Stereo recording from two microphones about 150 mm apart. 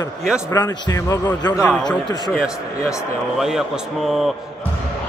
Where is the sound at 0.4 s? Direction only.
20° left (ahead or behind).